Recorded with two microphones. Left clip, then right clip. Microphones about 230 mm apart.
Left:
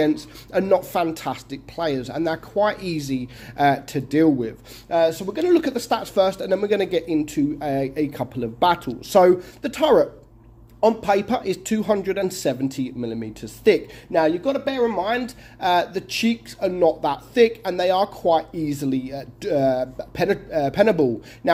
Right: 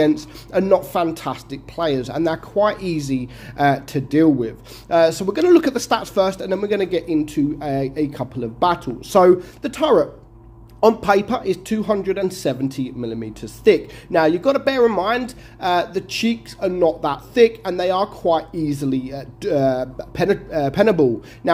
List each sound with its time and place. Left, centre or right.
0.0 s a man's voice: centre
4.9 s a man's voice: centre
10.8 s a man's voice: centre